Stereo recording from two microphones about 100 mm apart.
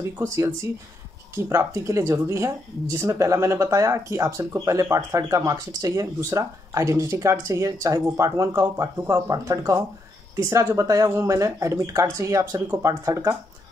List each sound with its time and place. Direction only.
0.2 s a woman's voice: 30° right (ahead or behind)